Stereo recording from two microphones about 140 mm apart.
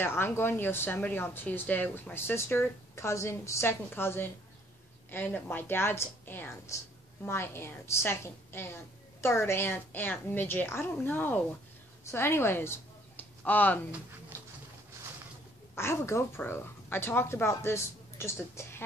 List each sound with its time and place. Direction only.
0.0 s a woman's voice: 15° left (ahead or behind)
15.7 s a woman's voice: 20° left (ahead or behind)